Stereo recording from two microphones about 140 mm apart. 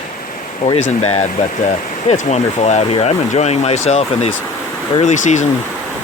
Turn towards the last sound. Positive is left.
turn(degrees=60)  # may be behind; listen again after turning